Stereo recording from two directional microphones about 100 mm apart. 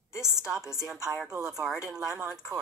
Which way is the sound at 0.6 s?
35° right (ahead or behind).